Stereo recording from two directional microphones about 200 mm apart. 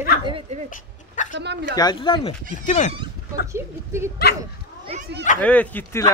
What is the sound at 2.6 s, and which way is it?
Speech, 35° left (ahead or behind).